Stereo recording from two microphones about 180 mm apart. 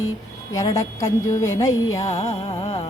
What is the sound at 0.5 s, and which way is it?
A woman's voice, 20° left (ahead or behind).